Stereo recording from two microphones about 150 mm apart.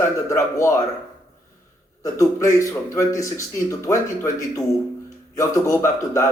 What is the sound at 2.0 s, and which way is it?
Speech, 20° left (ahead or behind).